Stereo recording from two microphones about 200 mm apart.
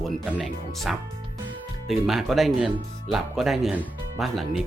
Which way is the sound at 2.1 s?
Centre (ahead or behind).